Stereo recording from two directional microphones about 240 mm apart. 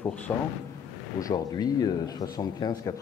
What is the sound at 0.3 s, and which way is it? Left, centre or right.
A man's voice, centre.